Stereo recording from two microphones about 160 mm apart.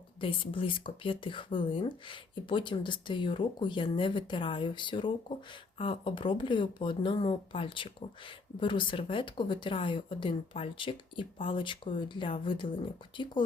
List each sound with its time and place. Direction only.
0.2 s speech: 35° left (ahead or behind)